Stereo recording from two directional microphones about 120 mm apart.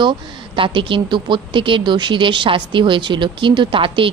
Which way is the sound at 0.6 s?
45° right (ahead or behind).